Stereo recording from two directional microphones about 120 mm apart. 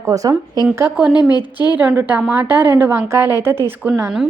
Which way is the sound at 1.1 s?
35° left (ahead or behind).